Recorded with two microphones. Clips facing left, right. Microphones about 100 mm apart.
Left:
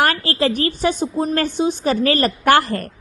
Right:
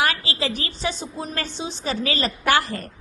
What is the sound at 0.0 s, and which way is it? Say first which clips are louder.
A woman's voice: left 6 dB; 50° left (ahead or behind).